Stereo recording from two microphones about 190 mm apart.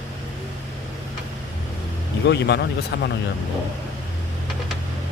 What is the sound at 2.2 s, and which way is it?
Speech, 60° left (ahead or behind).